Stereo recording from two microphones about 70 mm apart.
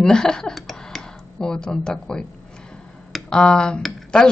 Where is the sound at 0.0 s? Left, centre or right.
Centre.